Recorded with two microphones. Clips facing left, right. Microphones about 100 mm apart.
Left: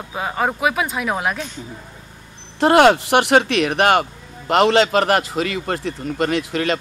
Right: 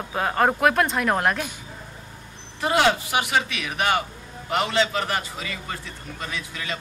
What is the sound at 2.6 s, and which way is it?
A man's voice, 65° left (ahead or behind).